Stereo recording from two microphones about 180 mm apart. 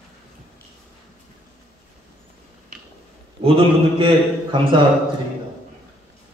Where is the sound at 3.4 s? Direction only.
30° right (ahead or behind).